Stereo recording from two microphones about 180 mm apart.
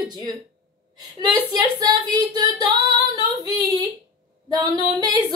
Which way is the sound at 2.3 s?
25° right (ahead or behind).